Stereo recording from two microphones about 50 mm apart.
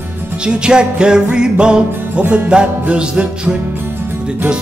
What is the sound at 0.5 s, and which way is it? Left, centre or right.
Music, centre.